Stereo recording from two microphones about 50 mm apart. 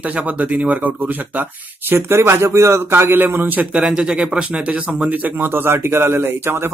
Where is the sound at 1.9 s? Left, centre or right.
Right.